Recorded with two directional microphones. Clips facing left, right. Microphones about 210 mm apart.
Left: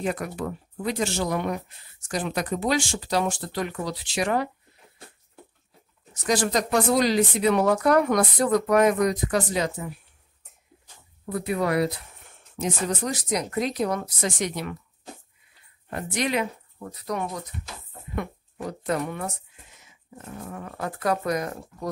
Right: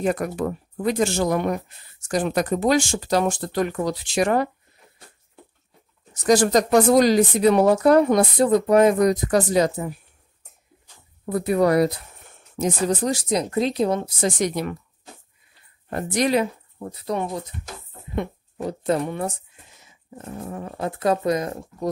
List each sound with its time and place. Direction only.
0.0 s speech: 45° right (ahead or behind)
6.2 s speech: 45° right (ahead or behind); by 9.1 s 30° right (ahead or behind)
9.1 s speech: 40° right (ahead or behind)
11.2 s speech: 40° right (ahead or behind); by 14.3 s 25° right (ahead or behind)
14.4 s speech: 40° right (ahead or behind)
15.9 s speech: 40° right (ahead or behind); by 21.8 s 25° right (ahead or behind)